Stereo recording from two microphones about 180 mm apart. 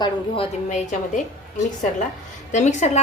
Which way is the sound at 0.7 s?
40° left (ahead or behind).